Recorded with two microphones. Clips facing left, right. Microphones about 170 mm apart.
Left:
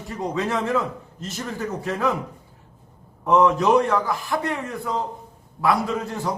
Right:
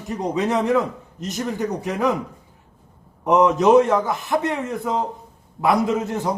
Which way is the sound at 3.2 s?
20° right (ahead or behind).